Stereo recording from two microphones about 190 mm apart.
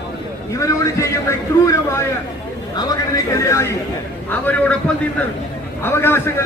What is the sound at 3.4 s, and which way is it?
A man's voice, 15° left (ahead or behind).